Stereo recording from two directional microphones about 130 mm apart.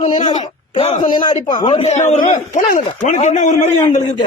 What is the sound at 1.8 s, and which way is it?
A man's voice, 60° left (ahead or behind).